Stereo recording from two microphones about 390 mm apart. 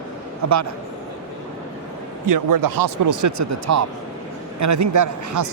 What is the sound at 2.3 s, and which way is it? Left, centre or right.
A man's voice, right.